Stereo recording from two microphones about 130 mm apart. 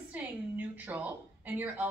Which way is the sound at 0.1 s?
10° right (ahead or behind).